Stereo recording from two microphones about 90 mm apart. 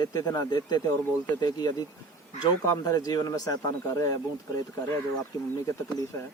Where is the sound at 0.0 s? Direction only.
40° left (ahead or behind).